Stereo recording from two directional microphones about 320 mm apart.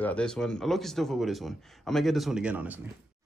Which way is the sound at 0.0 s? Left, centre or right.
Centre.